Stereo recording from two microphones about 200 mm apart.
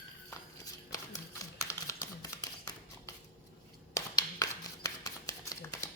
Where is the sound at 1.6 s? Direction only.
15° left (ahead or behind).